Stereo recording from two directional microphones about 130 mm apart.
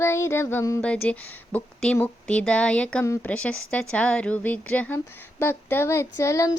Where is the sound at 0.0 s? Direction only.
20° left (ahead or behind).